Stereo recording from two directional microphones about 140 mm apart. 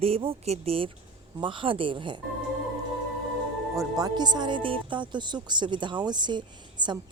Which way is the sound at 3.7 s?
25° right (ahead or behind).